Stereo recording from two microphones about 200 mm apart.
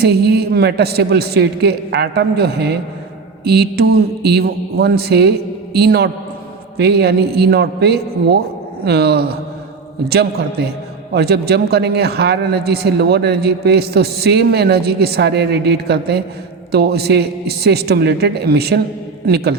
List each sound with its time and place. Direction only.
0.0 s speech: 55° right (ahead or behind)